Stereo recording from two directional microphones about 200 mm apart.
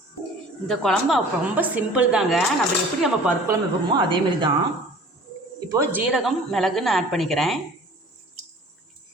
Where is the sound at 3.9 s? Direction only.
25° right (ahead or behind).